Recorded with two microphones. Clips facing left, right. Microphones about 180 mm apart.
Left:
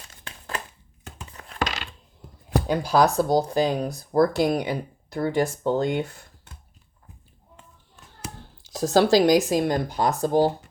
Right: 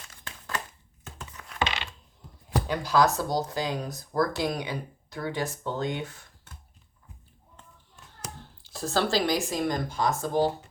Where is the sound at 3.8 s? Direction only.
30° left (ahead or behind).